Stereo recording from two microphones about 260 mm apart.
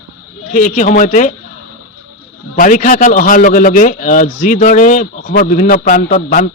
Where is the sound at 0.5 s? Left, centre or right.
Left.